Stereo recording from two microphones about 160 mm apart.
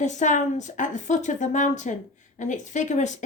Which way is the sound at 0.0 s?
50° left (ahead or behind).